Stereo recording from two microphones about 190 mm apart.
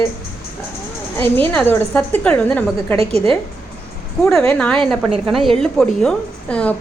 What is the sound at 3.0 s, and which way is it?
Speech, 30° right (ahead or behind).